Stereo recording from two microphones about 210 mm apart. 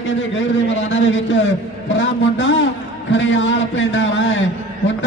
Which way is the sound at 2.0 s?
65° left (ahead or behind).